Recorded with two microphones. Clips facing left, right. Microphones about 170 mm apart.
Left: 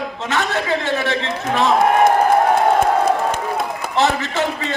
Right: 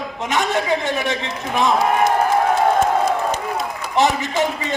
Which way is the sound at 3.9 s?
15° right (ahead or behind).